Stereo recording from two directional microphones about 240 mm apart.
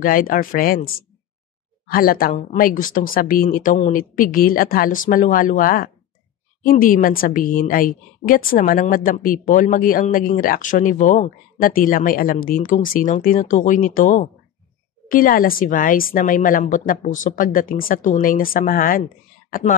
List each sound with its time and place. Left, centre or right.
0.0 s a woman's voice: left